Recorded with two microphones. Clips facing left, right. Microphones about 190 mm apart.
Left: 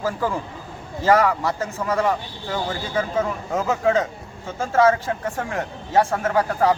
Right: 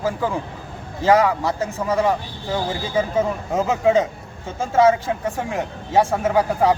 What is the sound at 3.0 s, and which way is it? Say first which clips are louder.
Speech: right 3 dB; 20° right (ahead or behind).